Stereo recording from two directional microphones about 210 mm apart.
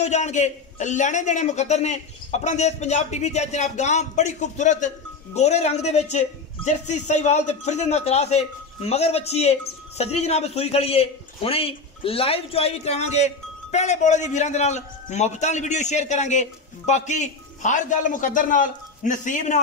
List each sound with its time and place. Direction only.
0.0 s a man's voice: 35° left (ahead or behind)